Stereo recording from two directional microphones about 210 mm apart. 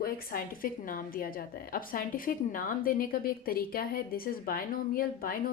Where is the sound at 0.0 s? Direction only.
45° left (ahead or behind).